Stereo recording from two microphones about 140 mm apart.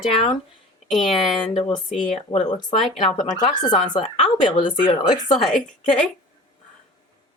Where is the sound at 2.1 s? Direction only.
50° left (ahead or behind).